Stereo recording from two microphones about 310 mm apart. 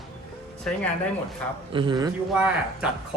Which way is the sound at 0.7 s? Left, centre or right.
Centre.